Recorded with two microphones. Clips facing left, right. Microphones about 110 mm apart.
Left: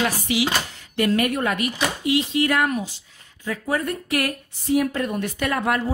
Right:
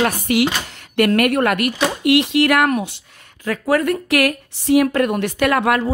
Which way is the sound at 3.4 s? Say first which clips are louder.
Right 7 dB; 85° right.